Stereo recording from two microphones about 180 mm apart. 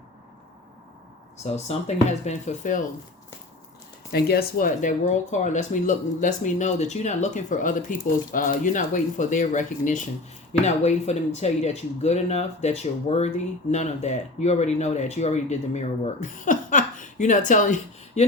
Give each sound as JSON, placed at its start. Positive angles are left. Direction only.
{"t": 1.5, "sound": "speech", "side_deg": 40}
{"t": 4.1, "sound": "speech", "side_deg": 60}